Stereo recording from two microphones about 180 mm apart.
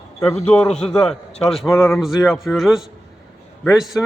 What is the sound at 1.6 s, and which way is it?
Speech, 15° left (ahead or behind).